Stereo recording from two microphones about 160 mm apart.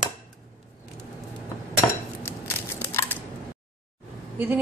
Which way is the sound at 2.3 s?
15° left (ahead or behind).